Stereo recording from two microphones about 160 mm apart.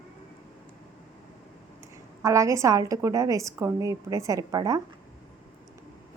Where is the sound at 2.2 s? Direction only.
20° right (ahead or behind).